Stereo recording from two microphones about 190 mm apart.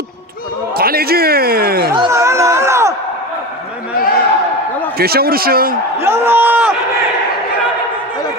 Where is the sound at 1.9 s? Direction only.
20° right (ahead or behind).